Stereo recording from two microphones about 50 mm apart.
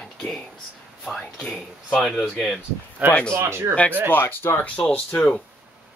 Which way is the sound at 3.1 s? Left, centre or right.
Centre.